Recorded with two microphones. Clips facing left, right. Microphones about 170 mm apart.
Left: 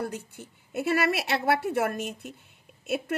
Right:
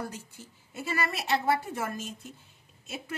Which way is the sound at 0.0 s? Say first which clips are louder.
Left 5 dB; 60° left (ahead or behind).